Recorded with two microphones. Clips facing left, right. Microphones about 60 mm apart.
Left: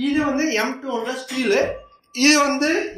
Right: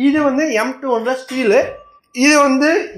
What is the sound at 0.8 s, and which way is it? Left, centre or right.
Speech, right.